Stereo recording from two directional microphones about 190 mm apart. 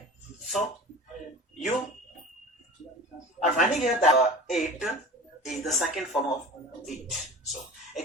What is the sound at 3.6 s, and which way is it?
Speech, 40° left (ahead or behind).